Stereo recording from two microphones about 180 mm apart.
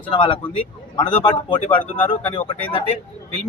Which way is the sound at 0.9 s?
25° left (ahead or behind).